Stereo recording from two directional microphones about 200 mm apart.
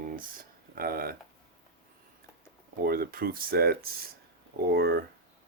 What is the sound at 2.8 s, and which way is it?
Speech, 50° right (ahead or behind).